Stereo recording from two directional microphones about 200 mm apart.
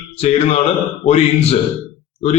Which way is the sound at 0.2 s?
30° left (ahead or behind).